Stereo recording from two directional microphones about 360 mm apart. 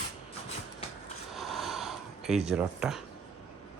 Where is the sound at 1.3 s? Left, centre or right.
Centre.